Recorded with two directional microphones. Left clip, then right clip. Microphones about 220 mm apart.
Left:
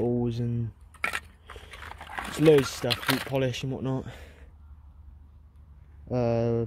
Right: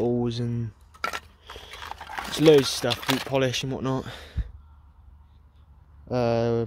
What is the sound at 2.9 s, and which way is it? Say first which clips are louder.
Speech: right 1 dB; 5° right (ahead or behind).